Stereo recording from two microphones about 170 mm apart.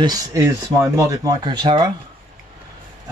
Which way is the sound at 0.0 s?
20° right (ahead or behind).